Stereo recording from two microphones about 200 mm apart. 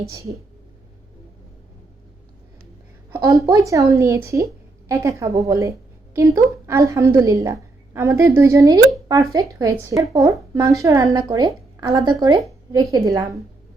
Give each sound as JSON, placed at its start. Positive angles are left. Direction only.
{"t": 0.1, "sound": "a woman's voice", "side_deg": -15}
{"t": 3.2, "sound": "a woman's voice", "side_deg": -15}